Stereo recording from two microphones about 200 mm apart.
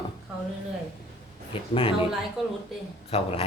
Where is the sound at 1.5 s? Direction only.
25° left (ahead or behind).